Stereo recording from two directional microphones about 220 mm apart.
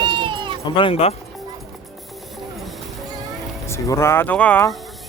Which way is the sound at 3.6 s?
10° left (ahead or behind).